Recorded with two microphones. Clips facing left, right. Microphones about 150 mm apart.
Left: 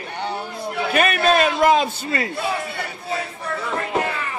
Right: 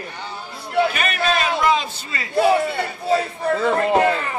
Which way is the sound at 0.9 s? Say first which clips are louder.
Left 4 dB; 55° left (ahead or behind).